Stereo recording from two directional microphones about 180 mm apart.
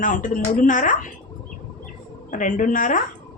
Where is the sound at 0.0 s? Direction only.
45° left (ahead or behind).